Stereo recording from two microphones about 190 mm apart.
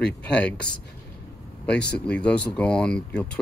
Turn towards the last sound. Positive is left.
turn(degrees=5)  # may be behind; listen again after turning